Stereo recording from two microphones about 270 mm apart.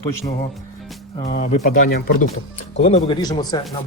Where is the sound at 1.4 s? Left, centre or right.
Left.